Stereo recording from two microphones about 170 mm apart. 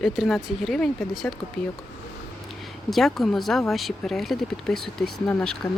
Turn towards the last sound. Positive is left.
turn(degrees=5)  # may be behind; listen again after turning